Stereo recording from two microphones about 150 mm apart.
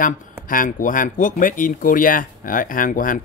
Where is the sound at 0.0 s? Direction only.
65° left (ahead or behind).